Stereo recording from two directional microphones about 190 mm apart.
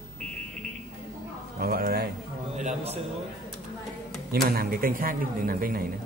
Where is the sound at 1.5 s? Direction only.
55° right (ahead or behind).